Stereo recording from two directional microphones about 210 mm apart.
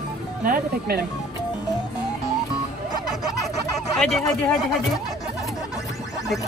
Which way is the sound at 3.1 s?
Centre (ahead or behind).